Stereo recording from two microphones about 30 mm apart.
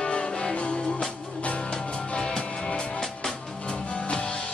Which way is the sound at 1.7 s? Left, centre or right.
Left.